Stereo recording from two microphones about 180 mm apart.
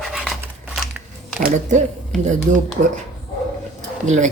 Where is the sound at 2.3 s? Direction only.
40° right (ahead or behind).